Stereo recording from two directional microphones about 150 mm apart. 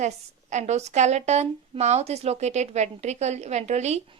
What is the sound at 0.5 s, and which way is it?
A woman's voice, 50° right (ahead or behind).